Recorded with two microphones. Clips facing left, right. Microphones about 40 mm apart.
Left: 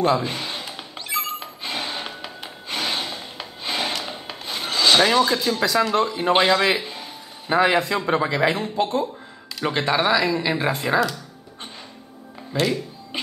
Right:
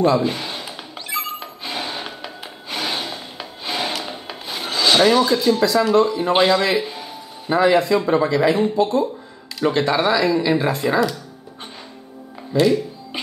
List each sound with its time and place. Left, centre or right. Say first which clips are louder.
0.2 s music: right 4 dB; centre
5.9 s speech: right 4 dB; centre
6.8 s a sound: right 6 dB; centre
7.5 s speech: right 3 dB; centre
9.6 s speech: right 3 dB; centre
12.5 s music: right 6 dB; centre